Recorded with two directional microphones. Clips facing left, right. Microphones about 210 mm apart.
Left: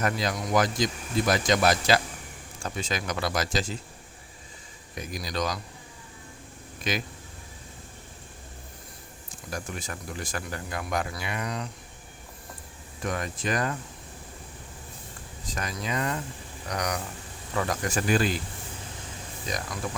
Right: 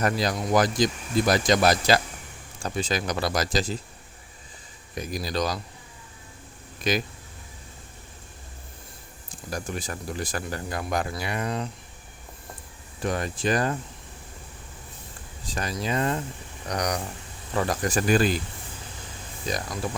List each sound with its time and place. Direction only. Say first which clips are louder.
0.0 s speech: right 3 dB; 35° right (ahead or behind)
4.9 s speech: right 3 dB; 35° right (ahead or behind)
6.9 s speech: right 5 dB; 40° right (ahead or behind)
9.5 s speech: right 3 dB; 35° right (ahead or behind)
13.0 s speech: right 4 dB; 30° right (ahead or behind)
15.4 s speech: right 4 dB; 30° right (ahead or behind)
19.5 s speech: right 4 dB; 35° right (ahead or behind)